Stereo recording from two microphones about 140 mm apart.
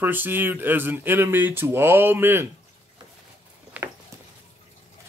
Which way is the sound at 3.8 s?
10° right (ahead or behind).